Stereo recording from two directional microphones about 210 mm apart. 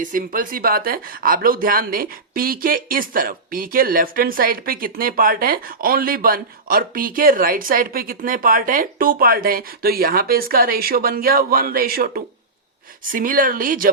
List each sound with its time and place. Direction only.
0.0 s speech: 40° right (ahead or behind)